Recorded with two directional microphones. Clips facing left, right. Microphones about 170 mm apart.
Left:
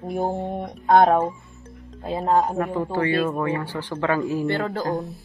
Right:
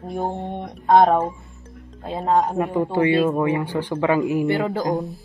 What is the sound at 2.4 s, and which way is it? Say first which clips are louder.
Speech: right 3 dB; 10° right (ahead or behind).